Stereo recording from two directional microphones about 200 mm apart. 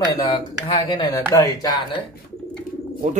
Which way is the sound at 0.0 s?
20° left (ahead or behind).